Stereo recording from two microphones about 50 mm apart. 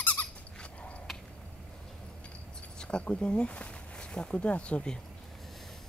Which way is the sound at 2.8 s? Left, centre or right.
Left.